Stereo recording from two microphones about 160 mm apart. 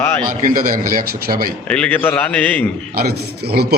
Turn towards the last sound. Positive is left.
turn(degrees=-85)